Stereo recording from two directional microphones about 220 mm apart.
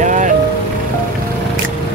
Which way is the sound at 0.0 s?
35° right (ahead or behind).